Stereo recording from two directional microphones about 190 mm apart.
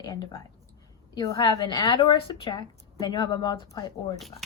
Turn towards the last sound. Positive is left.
turn(degrees=20)  # may be behind; listen again after turning